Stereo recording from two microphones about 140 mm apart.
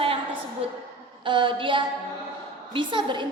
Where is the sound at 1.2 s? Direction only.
35° right (ahead or behind).